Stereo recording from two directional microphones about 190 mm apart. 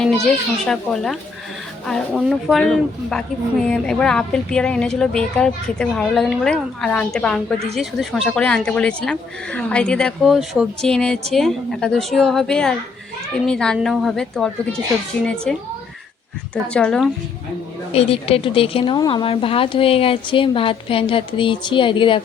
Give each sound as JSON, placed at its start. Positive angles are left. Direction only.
{"t": 0.0, "sound": "speech", "side_deg": 5}
{"t": 16.7, "sound": "speech", "side_deg": 5}
{"t": 17.9, "sound": "speech", "side_deg": 30}